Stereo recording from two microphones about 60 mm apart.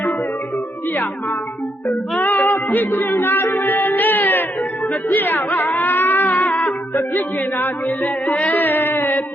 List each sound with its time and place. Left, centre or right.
2.2 s music: left
7.2 s speech: left